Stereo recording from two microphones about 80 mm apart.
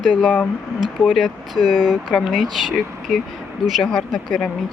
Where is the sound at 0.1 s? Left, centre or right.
Centre.